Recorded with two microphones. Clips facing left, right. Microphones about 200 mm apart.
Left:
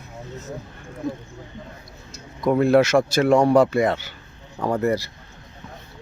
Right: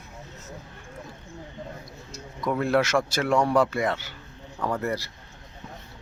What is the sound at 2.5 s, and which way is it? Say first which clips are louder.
Speech: left 7 dB; 20° left (ahead or behind).